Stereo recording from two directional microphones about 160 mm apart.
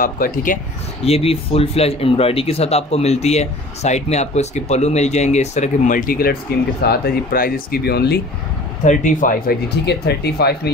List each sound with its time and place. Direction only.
0.0 s speech: 60° left (ahead or behind)
1.0 s speech: 40° left (ahead or behind); by 8.2 s 85° left
8.8 s speech: 55° left (ahead or behind); by 10.7 s 90° left